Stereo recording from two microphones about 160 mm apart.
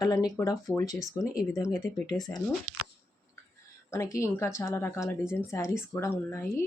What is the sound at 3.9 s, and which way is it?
A woman's voice, 15° left (ahead or behind).